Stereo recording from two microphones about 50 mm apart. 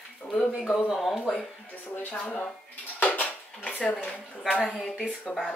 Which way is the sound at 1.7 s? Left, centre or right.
Left.